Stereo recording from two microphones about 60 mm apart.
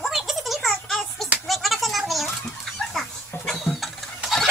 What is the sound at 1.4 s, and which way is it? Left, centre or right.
Music, centre.